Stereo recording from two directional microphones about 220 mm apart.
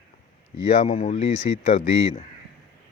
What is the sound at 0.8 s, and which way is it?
Speech, 35° left (ahead or behind).